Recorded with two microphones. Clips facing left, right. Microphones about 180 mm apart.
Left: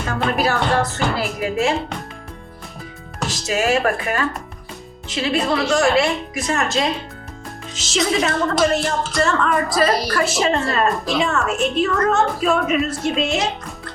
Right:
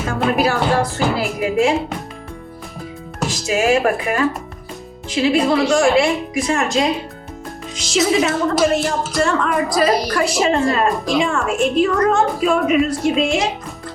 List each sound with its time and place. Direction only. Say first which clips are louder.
0.0 s a woman's voice: right 3 dB; 5° right (ahead or behind)
3.2 s speech: right 3 dB; centre (ahead or behind)